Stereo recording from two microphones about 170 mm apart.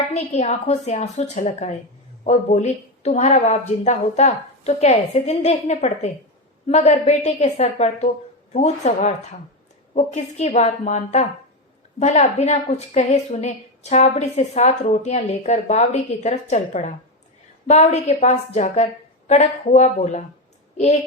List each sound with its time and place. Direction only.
0.1 s a woman's voice: 40° left (ahead or behind)